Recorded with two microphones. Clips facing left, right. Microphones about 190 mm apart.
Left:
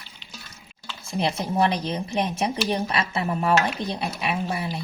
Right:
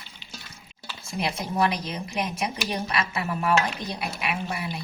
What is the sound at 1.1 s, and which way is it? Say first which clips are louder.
Speech: left 3 dB; 30° left (ahead or behind).